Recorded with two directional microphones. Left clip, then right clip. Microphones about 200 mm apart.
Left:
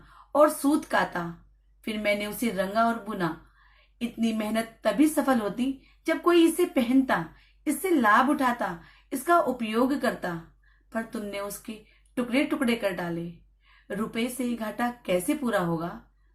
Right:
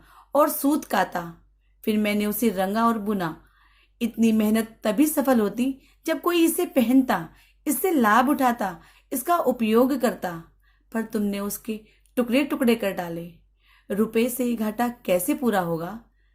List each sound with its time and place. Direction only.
0.3 s a woman's voice: 45° right (ahead or behind)